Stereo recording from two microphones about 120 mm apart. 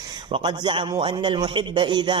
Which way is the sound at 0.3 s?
40° right (ahead or behind).